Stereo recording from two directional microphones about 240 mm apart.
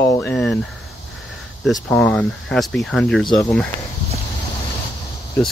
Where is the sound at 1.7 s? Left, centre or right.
Centre.